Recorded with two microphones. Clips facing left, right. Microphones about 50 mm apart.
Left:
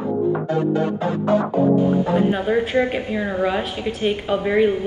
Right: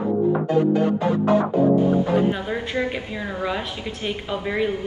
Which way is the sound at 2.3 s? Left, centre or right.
Centre.